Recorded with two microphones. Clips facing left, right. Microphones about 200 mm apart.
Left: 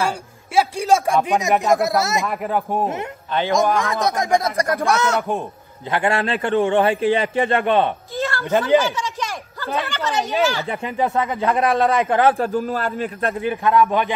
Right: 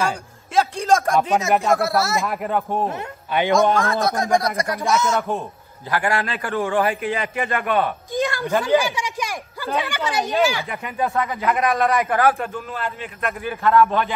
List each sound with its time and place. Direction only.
0.6 s speech: 10° left (ahead or behind)
2.2 s speech: centre (ahead or behind)
2.7 s speech: 15° left (ahead or behind)
3.3 s speech: 15° right (ahead or behind)
3.7 s speech: 15° left (ahead or behind)
4.6 s speech: 55° left (ahead or behind)
5.9 s a man's voice: 25° left (ahead or behind)
8.1 s a sound: 15° right (ahead or behind)
9.8 s speech: 10° right (ahead or behind)
10.7 s a man's voice: 30° left (ahead or behind)
13.4 s speech: 15° left (ahead or behind)